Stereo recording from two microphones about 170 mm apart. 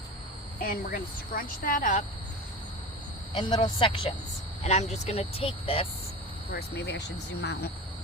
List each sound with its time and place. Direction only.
0.6 s speech: 60° left (ahead or behind)
3.3 s speech: 25° left (ahead or behind)
4.6 s speech: 40° left (ahead or behind)
6.5 s speech: 70° left (ahead or behind); by 7.7 s 85° left